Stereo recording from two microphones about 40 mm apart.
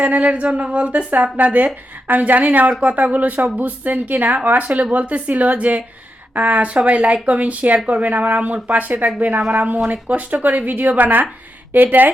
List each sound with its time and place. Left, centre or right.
0.0 s speech: right